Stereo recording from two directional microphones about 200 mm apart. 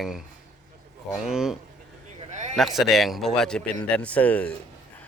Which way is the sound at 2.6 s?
Centre (ahead or behind).